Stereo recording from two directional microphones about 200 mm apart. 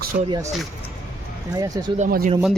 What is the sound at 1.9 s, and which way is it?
Speech, 45° right (ahead or behind).